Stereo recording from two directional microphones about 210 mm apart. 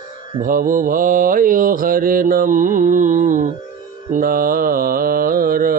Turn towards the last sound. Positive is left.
turn(degrees=-40)  # may be behind; listen again after turning